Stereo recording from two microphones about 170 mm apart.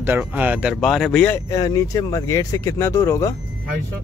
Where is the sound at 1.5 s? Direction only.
20° left (ahead or behind).